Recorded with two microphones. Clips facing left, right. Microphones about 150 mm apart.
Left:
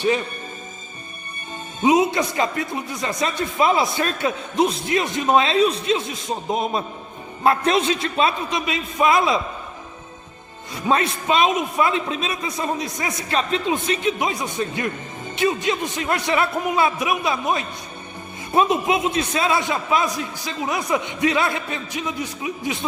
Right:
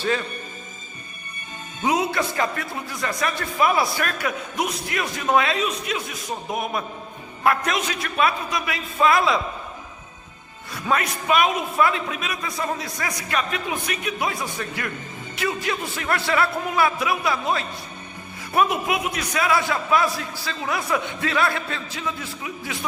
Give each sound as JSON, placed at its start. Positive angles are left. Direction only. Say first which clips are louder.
{"t": 1.8, "sound": "a man's voice", "louder": "left 5 dB", "side_deg": 20}
{"t": 10.8, "sound": "a man's voice", "louder": "left 3 dB", "side_deg": 25}